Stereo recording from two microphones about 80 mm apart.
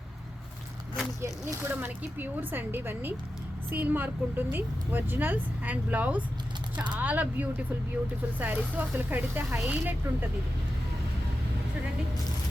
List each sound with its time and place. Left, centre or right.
1.2 s speech: right
1.7 s speech: right